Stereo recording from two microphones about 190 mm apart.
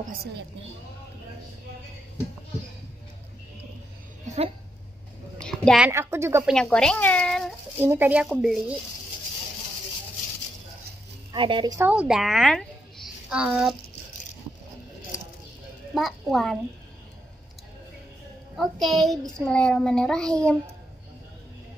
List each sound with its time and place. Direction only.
0.0 s a woman's voice: 55° right (ahead or behind)
5.4 s a sound: 5° left (ahead or behind)
5.9 s speech: 15° right (ahead or behind)
6.4 s speech: 5° left (ahead or behind)
7.8 s speech: 10° right (ahead or behind)
11.3 s speech: 25° right (ahead or behind)
11.8 s a woman's voice: 5° right (ahead or behind)
15.9 s a child's voice: centre (ahead or behind)
18.6 s a child's voice: centre (ahead or behind)